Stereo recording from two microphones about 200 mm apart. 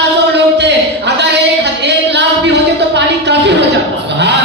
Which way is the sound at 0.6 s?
60° right (ahead or behind).